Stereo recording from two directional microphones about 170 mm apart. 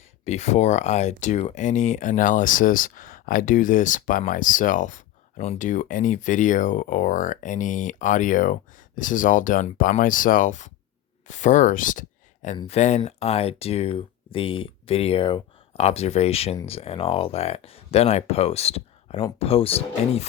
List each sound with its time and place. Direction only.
0.3 s speech: 40° left (ahead or behind)